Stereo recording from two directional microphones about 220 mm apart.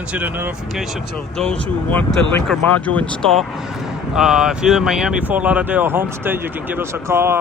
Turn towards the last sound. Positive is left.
turn(degrees=-10)  # may be behind; listen again after turning